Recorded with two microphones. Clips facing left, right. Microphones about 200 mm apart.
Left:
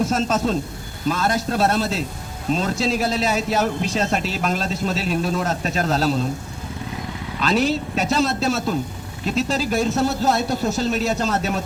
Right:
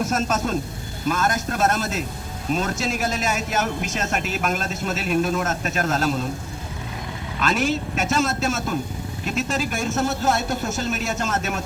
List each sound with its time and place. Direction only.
0.0 s speech: 30° left (ahead or behind)
7.4 s speech: 35° left (ahead or behind)